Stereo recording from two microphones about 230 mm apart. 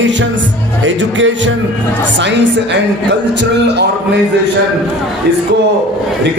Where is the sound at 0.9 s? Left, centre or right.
Right.